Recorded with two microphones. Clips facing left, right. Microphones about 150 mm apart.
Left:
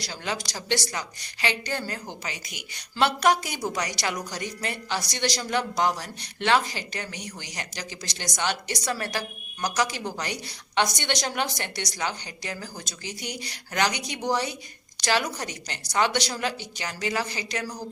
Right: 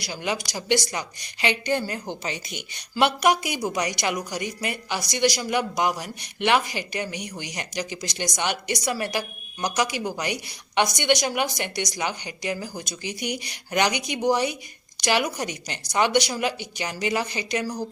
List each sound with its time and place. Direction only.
0.0 s speech: 15° right (ahead or behind)
2.9 s speech: 15° right (ahead or behind)